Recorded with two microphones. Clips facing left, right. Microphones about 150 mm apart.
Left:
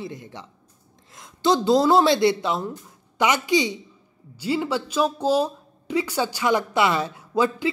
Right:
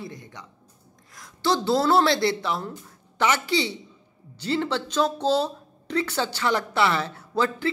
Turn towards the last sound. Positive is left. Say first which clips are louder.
# left 3 dB
turn(degrees=15)  # may be behind; listen again after turning